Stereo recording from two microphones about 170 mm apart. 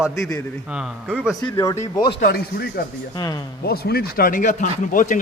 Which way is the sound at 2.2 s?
65° left (ahead or behind).